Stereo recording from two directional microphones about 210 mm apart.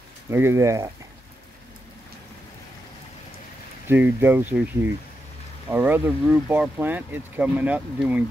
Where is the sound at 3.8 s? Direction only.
10° right (ahead or behind).